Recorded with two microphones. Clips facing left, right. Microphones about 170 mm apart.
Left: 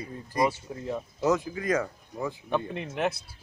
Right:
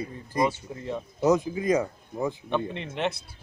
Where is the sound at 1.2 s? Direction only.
20° right (ahead or behind).